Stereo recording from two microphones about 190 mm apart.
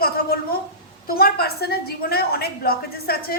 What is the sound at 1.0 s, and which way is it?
A woman's voice, 55° left (ahead or behind).